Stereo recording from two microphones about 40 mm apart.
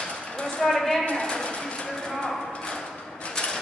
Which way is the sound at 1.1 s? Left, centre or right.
Left.